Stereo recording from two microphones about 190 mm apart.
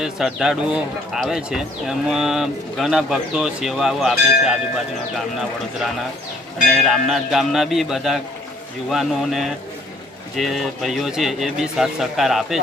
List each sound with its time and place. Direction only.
0.0 s a man's voice: centre (ahead or behind)
6.7 s a man's voice: centre (ahead or behind)